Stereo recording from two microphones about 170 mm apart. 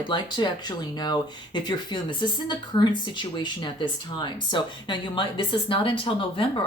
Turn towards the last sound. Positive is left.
turn(degrees=30)  # may be behind; listen again after turning